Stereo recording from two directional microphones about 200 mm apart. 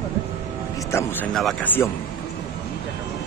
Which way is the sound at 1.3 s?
Centre (ahead or behind).